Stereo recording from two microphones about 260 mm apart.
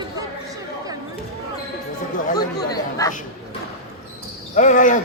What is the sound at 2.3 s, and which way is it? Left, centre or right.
Chatter, centre.